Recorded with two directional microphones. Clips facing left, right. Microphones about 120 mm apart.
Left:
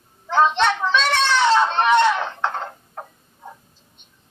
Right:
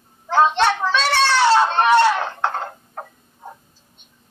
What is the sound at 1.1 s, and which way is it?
Children playing, 30° right (ahead or behind).